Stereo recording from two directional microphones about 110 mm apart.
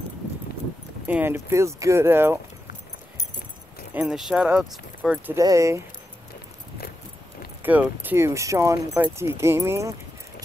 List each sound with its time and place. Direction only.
1.0 s speech: 20° right (ahead or behind)
3.9 s speech: 15° right (ahead or behind)
5.3 s speech: 30° right (ahead or behind)
7.6 s speech: 15° right (ahead or behind)